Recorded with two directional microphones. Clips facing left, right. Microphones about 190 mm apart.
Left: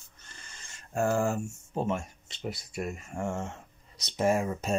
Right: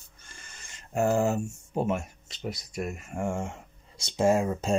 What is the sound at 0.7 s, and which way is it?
Speech, 20° right (ahead or behind).